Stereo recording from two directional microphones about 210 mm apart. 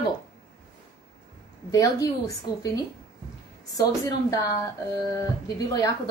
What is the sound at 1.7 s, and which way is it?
A woman's voice, 15° left (ahead or behind).